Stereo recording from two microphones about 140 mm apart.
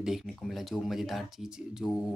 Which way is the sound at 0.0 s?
Centre (ahead or behind).